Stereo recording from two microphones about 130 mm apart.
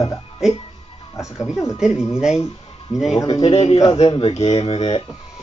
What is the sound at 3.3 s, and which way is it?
Speech, 50° left (ahead or behind).